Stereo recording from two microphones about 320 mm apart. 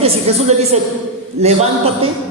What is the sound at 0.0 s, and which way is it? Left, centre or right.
A man's voice, centre.